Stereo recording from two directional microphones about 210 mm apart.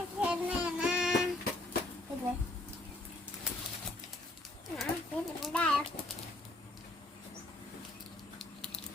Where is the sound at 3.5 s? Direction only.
5° right (ahead or behind).